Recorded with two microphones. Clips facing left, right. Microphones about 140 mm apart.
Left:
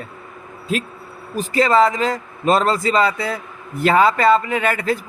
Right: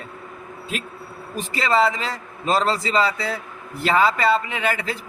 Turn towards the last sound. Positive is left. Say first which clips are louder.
# left 5 dB
turn(degrees=45)  # may be behind; listen again after turning